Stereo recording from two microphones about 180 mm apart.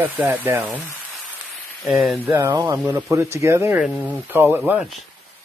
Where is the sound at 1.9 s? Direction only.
Centre (ahead or behind).